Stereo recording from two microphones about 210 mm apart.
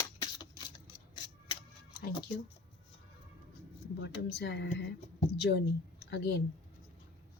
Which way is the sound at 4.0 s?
50° left (ahead or behind).